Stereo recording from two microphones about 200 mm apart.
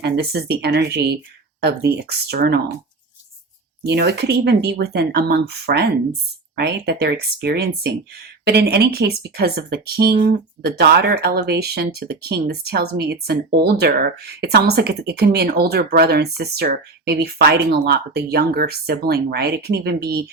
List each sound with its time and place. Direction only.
0.0 s speech: 55° right (ahead or behind)
3.8 s speech: 55° right (ahead or behind)